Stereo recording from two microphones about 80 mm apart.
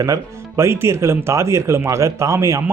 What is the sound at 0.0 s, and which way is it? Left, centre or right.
Speech, right.